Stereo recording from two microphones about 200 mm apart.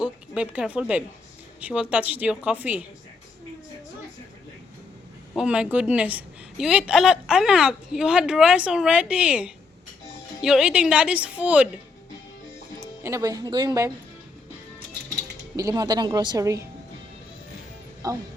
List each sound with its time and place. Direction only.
0.0 s a woman's voice: 5° right (ahead or behind)
5.3 s a woman's voice: 5° right (ahead or behind)
12.8 s speech: 15° right (ahead or behind)
15.5 s a woman's voice: 15° right (ahead or behind)
18.0 s a woman's voice: 15° right (ahead or behind)